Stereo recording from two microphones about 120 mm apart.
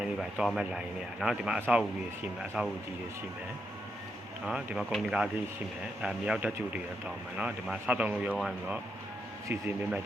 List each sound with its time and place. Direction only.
0.0 s a man's voice: 5° right (ahead or behind)
4.4 s a man's voice: 5° right (ahead or behind)
9.5 s a man's voice: 20° right (ahead or behind)